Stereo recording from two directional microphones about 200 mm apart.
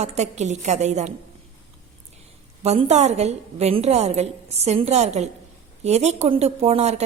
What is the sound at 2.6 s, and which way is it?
A woman's voice, 35° right (ahead or behind).